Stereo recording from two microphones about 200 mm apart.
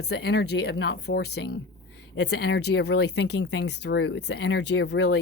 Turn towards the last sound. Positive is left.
turn(degrees=60)  # may be behind; listen again after turning